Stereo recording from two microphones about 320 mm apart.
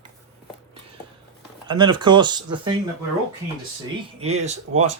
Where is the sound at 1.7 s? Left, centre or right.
Centre.